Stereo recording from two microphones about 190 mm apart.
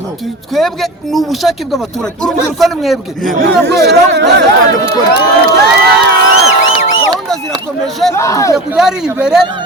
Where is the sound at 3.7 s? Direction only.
60° right (ahead or behind).